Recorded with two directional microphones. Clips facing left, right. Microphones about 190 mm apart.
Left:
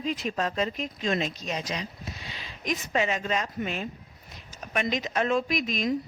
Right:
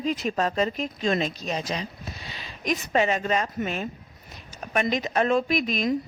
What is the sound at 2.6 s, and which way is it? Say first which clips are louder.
A woman's voice: right 4 dB; 55° right (ahead or behind).